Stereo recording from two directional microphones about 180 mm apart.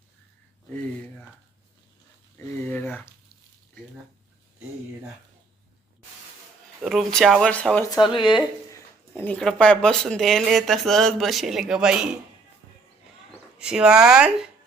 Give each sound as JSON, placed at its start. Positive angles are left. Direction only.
{"t": 2.6, "sound": "a sound", "side_deg": 10}
{"t": 6.8, "sound": "speech", "side_deg": 0}
{"t": 8.1, "sound": "speech", "side_deg": 25}
{"t": 8.7, "sound": "speech", "side_deg": 10}
{"t": 13.6, "sound": "speech", "side_deg": -5}